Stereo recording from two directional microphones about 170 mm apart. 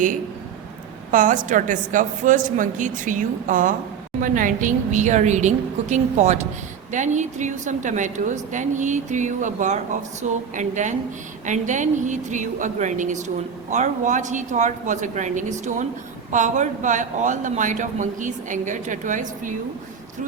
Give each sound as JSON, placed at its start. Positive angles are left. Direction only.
{"t": 1.1, "sound": "a woman's voice", "side_deg": -50}